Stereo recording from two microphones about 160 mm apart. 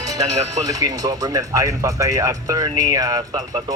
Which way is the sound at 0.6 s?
20° right (ahead or behind).